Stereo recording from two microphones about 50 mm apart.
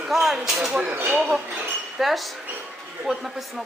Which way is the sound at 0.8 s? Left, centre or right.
Right.